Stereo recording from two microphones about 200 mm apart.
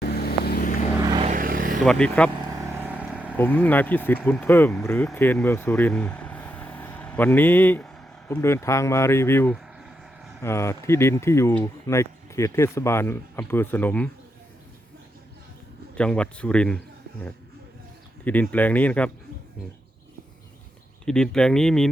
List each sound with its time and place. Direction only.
0.0 s vehicle: 50° left (ahead or behind)
1.2 s vehicle: 40° right (ahead or behind)
1.8 s a man's voice: 5° left (ahead or behind)
2.4 s vehicle: 15° right (ahead or behind)
3.3 s speech: 10° left (ahead or behind)
9.6 s a sound: 5° right (ahead or behind)
10.4 s speech: 15° left (ahead or behind)
16.0 s a man's voice: 5° left (ahead or behind)
18.3 s speech: 10° left (ahead or behind)
21.0 s a man's voice: 5° left (ahead or behind)